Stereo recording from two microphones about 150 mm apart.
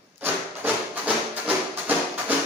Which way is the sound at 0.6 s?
10° right (ahead or behind).